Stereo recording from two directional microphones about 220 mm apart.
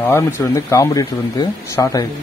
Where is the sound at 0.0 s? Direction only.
10° left (ahead or behind).